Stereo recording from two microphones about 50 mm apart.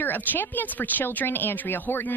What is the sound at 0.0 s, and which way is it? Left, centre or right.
A woman's voice, left.